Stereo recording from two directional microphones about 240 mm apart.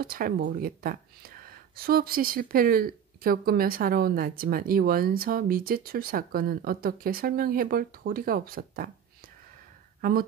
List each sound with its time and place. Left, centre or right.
0.0 s speech: right